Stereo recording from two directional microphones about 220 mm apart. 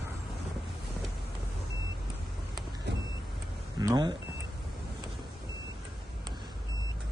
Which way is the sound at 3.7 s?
20° right (ahead or behind).